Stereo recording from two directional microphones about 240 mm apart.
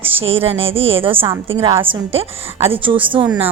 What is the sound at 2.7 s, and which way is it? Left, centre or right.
Speech, right.